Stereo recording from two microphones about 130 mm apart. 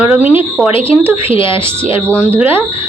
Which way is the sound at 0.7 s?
45° left (ahead or behind).